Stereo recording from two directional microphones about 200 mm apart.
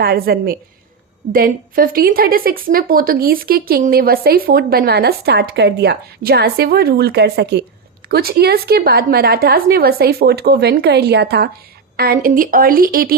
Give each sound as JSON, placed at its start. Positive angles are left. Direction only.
{"t": 0.0, "sound": "a woman's voice", "side_deg": -50}